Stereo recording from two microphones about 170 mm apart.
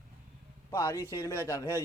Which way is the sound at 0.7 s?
20° left (ahead or behind).